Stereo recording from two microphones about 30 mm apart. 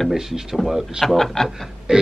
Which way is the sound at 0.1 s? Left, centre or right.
Centre.